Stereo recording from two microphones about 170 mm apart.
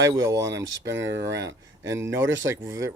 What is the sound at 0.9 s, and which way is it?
Speech, 90° right.